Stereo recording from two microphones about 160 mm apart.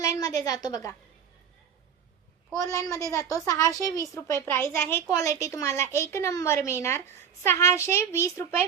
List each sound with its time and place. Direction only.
0.0 s a woman's voice: 20° left (ahead or behind)
2.7 s a woman's voice: 20° left (ahead or behind)